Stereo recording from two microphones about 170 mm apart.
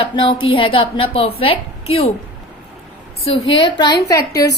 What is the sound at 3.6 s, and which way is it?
Speech, 25° left (ahead or behind).